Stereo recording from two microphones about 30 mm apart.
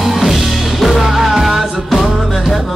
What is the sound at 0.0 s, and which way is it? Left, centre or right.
Music, centre.